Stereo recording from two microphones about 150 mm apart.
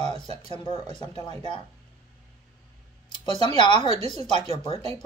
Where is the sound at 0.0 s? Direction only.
45° right (ahead or behind).